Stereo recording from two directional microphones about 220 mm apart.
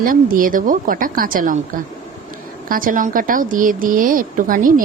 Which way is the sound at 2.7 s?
40° right (ahead or behind).